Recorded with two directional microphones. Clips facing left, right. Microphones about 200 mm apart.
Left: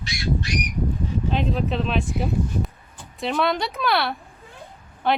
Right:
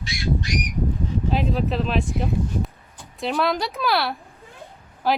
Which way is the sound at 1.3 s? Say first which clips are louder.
Right 1 dB; centre (ahead or behind).